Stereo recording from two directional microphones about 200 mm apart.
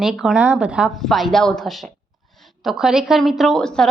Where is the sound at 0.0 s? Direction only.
Centre (ahead or behind).